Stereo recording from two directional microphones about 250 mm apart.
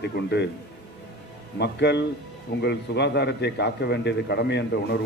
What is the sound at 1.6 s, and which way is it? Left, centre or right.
A man's voice, left.